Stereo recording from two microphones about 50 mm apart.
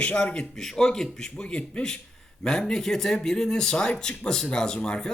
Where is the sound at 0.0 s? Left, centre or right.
Left.